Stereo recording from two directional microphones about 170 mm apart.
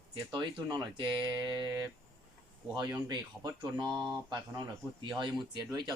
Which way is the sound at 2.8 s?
25° right (ahead or behind).